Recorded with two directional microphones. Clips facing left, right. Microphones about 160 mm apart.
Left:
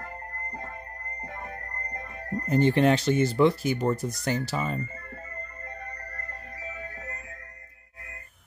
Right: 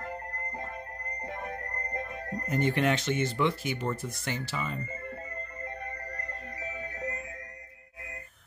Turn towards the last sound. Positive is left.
turn(degrees=-20)  # may be behind; listen again after turning